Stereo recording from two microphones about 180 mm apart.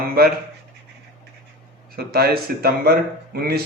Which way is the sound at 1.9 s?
60° right (ahead or behind).